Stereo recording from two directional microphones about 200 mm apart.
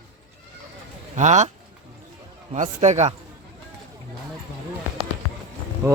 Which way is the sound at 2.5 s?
35° right (ahead or behind).